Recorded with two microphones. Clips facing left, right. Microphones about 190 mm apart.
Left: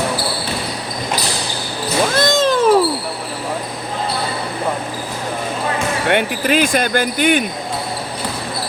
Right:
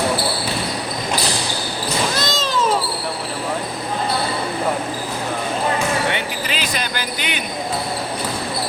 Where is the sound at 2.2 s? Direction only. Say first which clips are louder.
Left 7 dB; 55° left (ahead or behind).